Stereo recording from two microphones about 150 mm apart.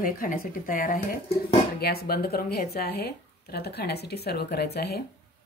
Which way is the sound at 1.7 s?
90° left.